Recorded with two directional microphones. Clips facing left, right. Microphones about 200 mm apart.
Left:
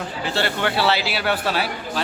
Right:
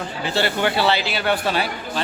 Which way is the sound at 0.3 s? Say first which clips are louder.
Right 2 dB; centre (ahead or behind).